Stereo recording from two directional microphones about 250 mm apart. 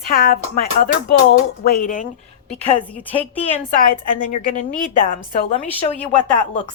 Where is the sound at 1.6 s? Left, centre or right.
Left.